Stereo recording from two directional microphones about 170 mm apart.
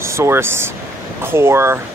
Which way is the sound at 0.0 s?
15° right (ahead or behind).